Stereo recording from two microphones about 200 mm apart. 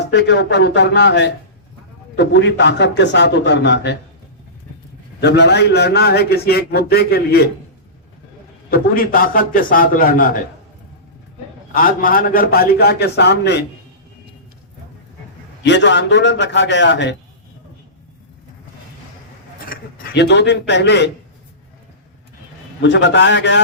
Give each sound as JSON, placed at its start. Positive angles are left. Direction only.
{"t": 0.1, "sound": "a man's voice", "side_deg": 60}
{"t": 5.2, "sound": "a man's voice", "side_deg": 55}
{"t": 8.7, "sound": "a man's voice", "side_deg": 45}
{"t": 11.7, "sound": "a man's voice", "side_deg": 45}
{"t": 15.6, "sound": "a man's voice", "side_deg": 60}
{"t": 19.7, "sound": "a man's voice", "side_deg": 55}
{"t": 22.8, "sound": "a man's voice", "side_deg": 60}